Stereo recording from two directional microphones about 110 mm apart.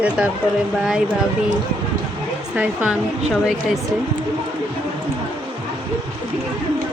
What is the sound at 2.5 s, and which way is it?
Speech, 10° right (ahead or behind).